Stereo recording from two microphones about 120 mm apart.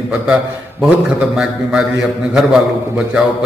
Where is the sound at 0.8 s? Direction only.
5° right (ahead or behind).